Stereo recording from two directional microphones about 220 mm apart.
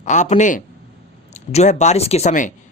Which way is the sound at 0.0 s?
35° left (ahead or behind).